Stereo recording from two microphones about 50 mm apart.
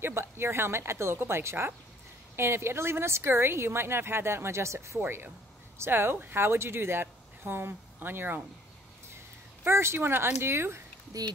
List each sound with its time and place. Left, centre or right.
0.0 s a woman's voice: right
5.0 s speech: right
9.7 s a woman's voice: right